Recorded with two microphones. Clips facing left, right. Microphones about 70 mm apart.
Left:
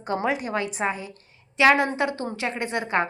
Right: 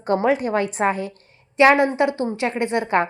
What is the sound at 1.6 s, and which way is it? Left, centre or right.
A woman's voice, right.